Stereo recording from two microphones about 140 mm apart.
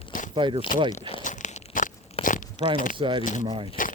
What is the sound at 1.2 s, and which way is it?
Crunch, 60° left (ahead or behind).